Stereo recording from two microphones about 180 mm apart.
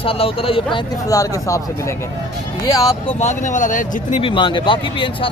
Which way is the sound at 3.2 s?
40° left (ahead or behind).